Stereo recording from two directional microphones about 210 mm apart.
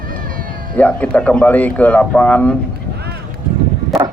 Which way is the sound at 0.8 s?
5° left (ahead or behind).